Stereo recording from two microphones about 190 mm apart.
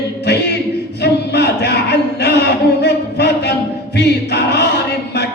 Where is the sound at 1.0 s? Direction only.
60° left (ahead or behind).